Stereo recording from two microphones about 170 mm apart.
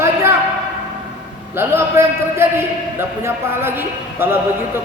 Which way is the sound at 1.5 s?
15° right (ahead or behind).